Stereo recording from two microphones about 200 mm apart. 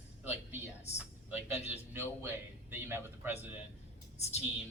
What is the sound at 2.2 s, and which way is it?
A man's voice, 10° right (ahead or behind).